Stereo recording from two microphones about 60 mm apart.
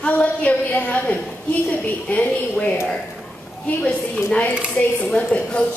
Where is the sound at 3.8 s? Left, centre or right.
Left.